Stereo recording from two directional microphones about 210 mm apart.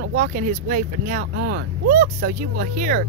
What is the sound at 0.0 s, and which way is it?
Speech, 40° right (ahead or behind).